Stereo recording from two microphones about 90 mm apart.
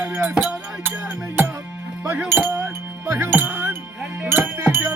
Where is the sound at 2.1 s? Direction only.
20° right (ahead or behind).